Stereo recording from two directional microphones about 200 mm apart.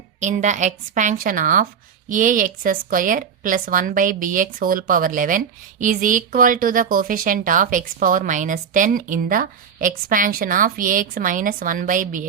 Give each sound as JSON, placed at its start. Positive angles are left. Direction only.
{"t": 0.2, "sound": "a woman's voice", "side_deg": -35}